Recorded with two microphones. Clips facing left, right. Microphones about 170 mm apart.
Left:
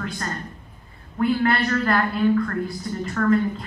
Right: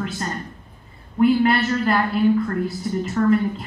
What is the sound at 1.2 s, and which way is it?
A woman's voice, 20° right (ahead or behind).